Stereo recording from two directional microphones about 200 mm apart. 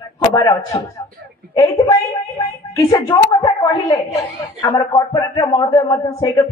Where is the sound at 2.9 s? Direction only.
15° left (ahead or behind).